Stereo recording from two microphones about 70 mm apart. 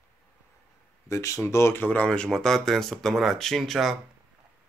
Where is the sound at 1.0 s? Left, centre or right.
Left.